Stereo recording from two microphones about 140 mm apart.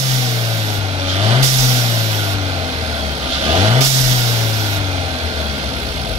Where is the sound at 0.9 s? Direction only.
40° right (ahead or behind).